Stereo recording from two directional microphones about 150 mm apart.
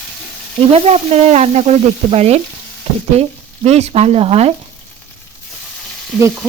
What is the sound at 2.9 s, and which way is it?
Frying, 45° right (ahead or behind).